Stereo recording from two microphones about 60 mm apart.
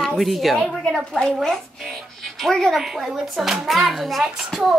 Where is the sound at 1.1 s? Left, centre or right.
Centre.